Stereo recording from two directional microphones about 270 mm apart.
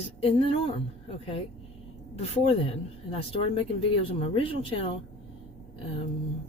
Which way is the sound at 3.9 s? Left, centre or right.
Left.